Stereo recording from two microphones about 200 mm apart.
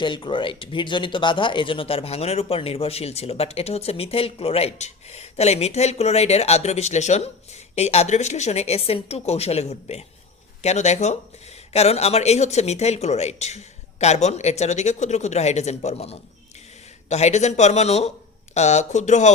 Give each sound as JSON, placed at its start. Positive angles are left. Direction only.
{"t": 0.0, "sound": "speech", "side_deg": 25}